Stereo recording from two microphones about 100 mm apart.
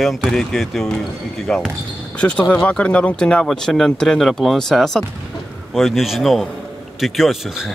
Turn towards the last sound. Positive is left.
turn(degrees=-5)  # may be behind; listen again after turning